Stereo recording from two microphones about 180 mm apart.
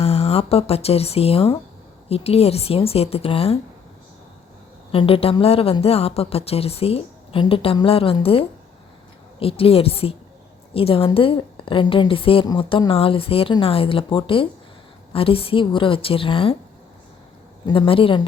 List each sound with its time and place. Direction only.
0.0 s a woman's voice: 35° left (ahead or behind)
4.9 s a woman's voice: 30° left (ahead or behind)
17.7 s a woman's voice: 30° left (ahead or behind)